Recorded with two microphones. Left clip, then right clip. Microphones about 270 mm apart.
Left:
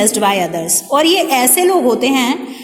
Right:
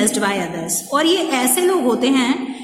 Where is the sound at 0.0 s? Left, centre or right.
Centre.